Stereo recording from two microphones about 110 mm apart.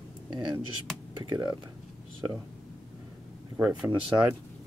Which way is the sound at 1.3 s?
35° right (ahead or behind).